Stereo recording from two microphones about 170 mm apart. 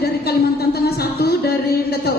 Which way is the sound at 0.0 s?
70° left (ahead or behind).